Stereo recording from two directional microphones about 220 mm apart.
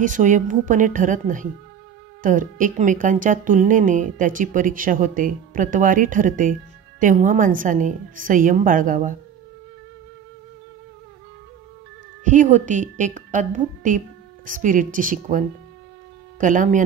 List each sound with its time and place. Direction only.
0.0 s speech: 35° right (ahead or behind)
12.3 s speech: 35° right (ahead or behind)